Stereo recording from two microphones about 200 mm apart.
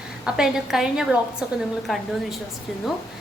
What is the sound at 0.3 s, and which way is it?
A woman's voice, 5° right (ahead or behind).